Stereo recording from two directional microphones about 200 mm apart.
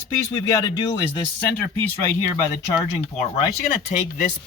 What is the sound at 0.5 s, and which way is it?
Speech, 20° left (ahead or behind).